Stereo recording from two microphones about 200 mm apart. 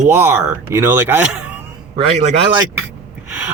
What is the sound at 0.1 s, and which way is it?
Speech, 10° right (ahead or behind).